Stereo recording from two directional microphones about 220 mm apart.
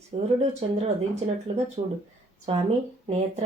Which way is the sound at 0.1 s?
25° right (ahead or behind).